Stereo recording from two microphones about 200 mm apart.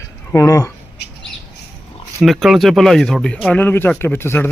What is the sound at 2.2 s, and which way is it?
Speech, centre (ahead or behind).